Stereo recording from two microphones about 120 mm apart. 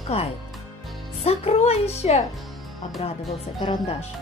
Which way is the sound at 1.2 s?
60° left (ahead or behind).